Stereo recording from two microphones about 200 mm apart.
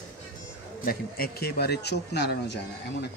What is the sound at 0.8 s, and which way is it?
Speech, 50° left (ahead or behind).